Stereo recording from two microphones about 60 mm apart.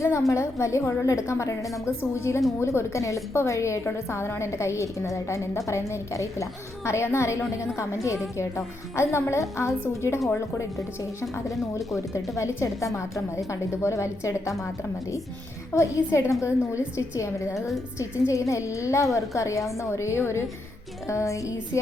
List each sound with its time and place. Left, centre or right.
0.0 s a woman's voice: left
11.5 s speech: centre
12.4 s a woman's voice: left
15.7 s a woman's voice: left
19.9 s a woman's voice: left
21.1 s a woman's voice: left